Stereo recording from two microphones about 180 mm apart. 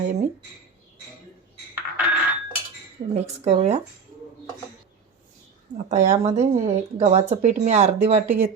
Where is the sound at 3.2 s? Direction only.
35° right (ahead or behind).